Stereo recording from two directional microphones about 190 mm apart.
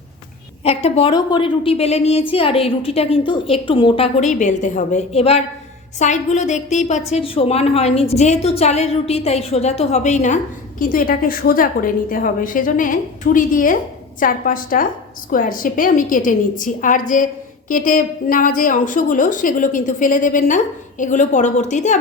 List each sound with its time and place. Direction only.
0.6 s a woman's voice: 30° left (ahead or behind)